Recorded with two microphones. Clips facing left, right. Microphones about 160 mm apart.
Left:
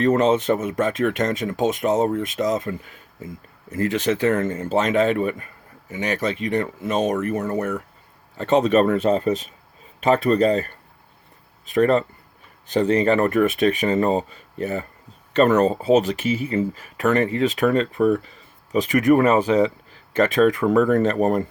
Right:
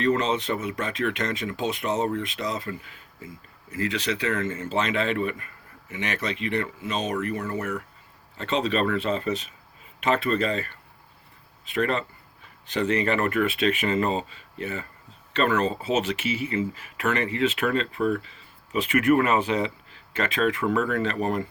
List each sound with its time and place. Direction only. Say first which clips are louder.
0.0 s speech: left 6 dB; 45° left (ahead or behind)
3.8 s speech: left 7 dB; 50° left (ahead or behind)